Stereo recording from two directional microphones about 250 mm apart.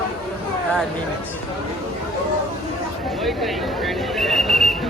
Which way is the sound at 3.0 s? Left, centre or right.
Centre.